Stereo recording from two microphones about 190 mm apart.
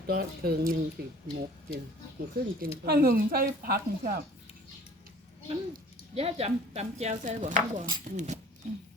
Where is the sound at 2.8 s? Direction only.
50° right (ahead or behind).